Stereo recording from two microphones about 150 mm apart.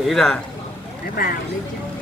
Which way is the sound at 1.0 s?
75° left (ahead or behind).